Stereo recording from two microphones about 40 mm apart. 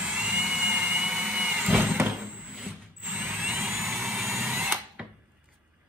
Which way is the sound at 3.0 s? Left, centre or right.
Right.